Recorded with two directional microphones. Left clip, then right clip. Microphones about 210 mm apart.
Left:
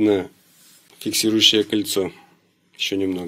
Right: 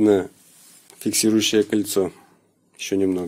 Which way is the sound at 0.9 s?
15° right (ahead or behind).